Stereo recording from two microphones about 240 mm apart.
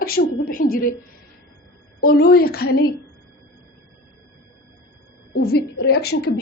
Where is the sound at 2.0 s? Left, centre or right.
Left.